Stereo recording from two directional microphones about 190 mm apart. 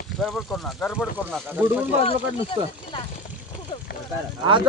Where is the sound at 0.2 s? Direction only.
Centre (ahead or behind).